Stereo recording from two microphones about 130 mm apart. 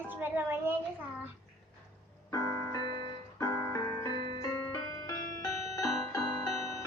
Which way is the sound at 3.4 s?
25° left (ahead or behind).